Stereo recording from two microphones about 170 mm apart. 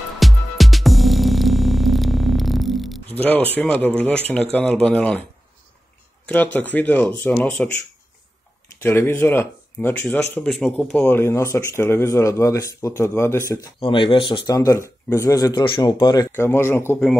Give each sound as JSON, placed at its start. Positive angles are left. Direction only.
{"t": 0.2, "sound": "music", "side_deg": 0}
{"t": 3.1, "sound": "speech", "side_deg": 10}
{"t": 6.2, "sound": "speech", "side_deg": 10}
{"t": 8.8, "sound": "speech", "side_deg": 15}
{"t": 10.3, "sound": "speech", "side_deg": 0}
{"t": 13.7, "sound": "speech", "side_deg": 30}
{"t": 16.3, "sound": "speech", "side_deg": 15}